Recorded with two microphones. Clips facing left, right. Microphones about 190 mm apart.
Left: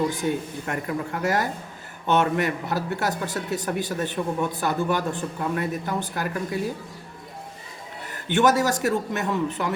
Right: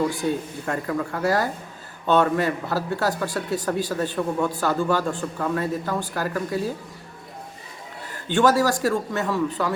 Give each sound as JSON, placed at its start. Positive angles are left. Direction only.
{"t": 0.1, "sound": "speech", "side_deg": 20}
{"t": 8.3, "sound": "speech", "side_deg": 20}